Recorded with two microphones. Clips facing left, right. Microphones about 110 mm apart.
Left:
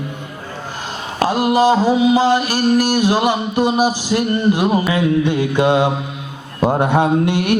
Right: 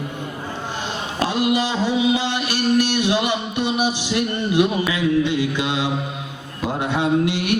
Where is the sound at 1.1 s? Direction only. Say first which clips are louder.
Left 5 dB; 45° left (ahead or behind).